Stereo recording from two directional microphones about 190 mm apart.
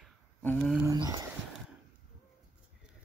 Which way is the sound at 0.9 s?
20° right (ahead or behind).